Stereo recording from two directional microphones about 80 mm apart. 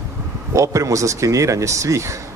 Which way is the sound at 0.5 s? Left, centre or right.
Right.